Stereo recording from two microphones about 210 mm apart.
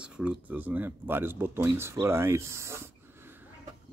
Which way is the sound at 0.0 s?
5° right (ahead or behind).